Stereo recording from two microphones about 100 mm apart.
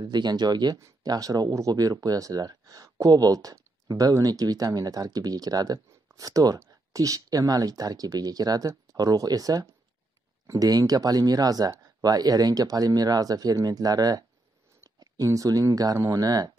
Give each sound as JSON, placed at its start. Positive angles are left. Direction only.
{"t": 0.0, "sound": "speech", "side_deg": -45}